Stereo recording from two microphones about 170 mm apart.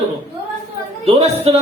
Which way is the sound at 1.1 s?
35° right (ahead or behind).